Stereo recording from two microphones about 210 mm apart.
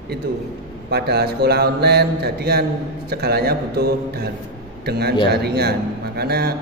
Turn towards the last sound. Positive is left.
turn(degrees=-50)  # may be behind; listen again after turning